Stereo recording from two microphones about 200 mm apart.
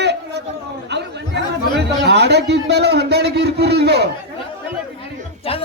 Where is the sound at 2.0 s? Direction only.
55° right (ahead or behind).